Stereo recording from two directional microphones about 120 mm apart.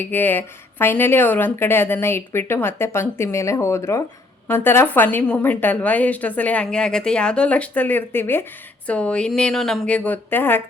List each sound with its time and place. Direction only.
0.0 s a woman's voice: 15° left (ahead or behind)